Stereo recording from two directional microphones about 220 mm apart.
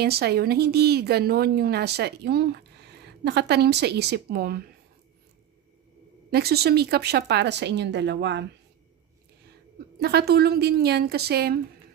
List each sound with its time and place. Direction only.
0.0 s speech: 45° right (ahead or behind)
6.3 s speech: 45° right (ahead or behind)
9.9 s speech: 45° right (ahead or behind)